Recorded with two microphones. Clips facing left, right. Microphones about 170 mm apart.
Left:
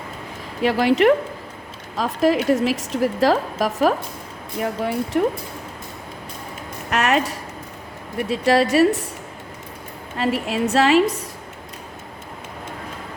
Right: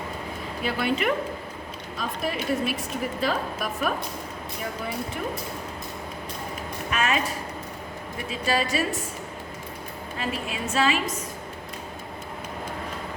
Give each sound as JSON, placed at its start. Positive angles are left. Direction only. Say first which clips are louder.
{"t": 0.6, "sound": "a woman's voice", "louder": "left 10 dB", "side_deg": 90}
{"t": 4.6, "sound": "a woman's voice", "louder": "left 9 dB", "side_deg": 70}
{"t": 6.9, "sound": "a sound", "louder": "left 6 dB", "side_deg": 75}
{"t": 8.3, "sound": "a woman's voice", "louder": "left 9 dB", "side_deg": 75}
{"t": 10.2, "sound": "a woman's voice", "louder": "left 10 dB", "side_deg": 75}